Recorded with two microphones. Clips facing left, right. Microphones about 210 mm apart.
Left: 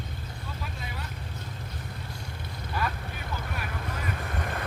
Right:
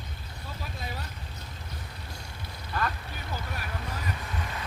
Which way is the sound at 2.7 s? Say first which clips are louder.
Even; 10° left (ahead or behind).